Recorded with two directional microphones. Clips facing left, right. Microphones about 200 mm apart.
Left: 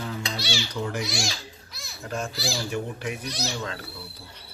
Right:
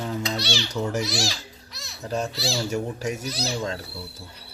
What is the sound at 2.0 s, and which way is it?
Speech, 35° right (ahead or behind).